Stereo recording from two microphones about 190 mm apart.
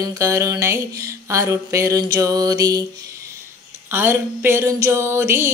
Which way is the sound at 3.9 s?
10° right (ahead or behind).